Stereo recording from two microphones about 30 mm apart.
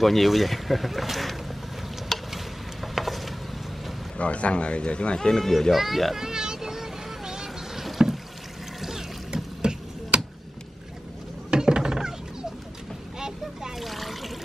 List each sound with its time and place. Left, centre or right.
0.0 s speech: centre
2.3 s a sound: centre
4.2 s speech: left
5.4 s speech: centre
6.1 s vehicle: centre
9.3 s a sound: right
11.6 s a sound: right
13.2 s boat: right
13.7 s trickle: centre